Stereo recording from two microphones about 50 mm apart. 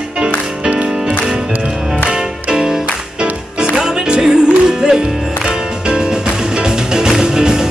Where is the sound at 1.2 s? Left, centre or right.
Centre.